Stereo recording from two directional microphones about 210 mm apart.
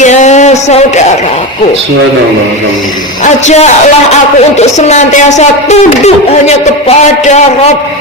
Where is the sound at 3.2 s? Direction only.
35° left (ahead or behind).